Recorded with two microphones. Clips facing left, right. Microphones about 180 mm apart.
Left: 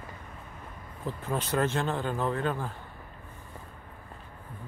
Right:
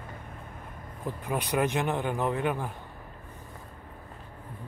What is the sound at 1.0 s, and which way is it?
Speech, 15° right (ahead or behind).